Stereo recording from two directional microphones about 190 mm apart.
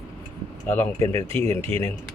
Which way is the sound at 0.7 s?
10° left (ahead or behind).